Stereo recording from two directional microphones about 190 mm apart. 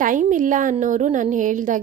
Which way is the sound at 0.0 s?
45° right (ahead or behind).